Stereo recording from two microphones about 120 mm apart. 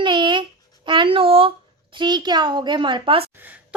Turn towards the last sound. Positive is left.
turn(degrees=-15)  # may be behind; listen again after turning